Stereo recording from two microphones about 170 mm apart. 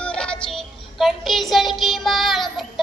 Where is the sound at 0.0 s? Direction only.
5° left (ahead or behind).